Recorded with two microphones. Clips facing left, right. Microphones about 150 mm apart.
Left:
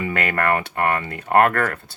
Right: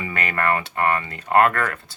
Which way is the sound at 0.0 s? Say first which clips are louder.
Left 2 dB; 60° left (ahead or behind).